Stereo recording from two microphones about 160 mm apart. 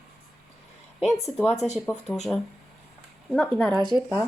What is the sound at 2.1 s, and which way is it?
Speech, 5° left (ahead or behind).